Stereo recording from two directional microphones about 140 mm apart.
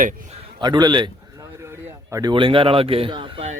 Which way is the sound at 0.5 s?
30° right (ahead or behind).